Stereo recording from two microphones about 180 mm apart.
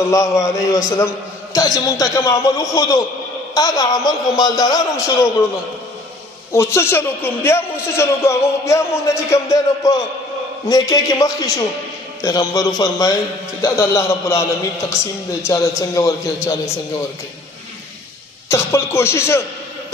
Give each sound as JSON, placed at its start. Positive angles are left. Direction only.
{"t": 0.1, "sound": "a man's voice", "side_deg": 15}
{"t": 6.5, "sound": "a man's voice", "side_deg": 15}
{"t": 18.5, "sound": "a man's voice", "side_deg": 15}